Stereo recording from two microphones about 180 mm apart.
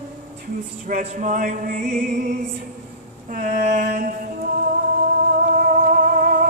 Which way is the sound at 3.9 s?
50° right (ahead or behind).